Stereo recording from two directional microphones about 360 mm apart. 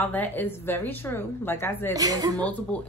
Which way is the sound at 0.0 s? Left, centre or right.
Centre.